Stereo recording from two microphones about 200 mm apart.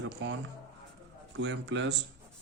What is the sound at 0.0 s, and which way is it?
Speech, 65° right (ahead or behind).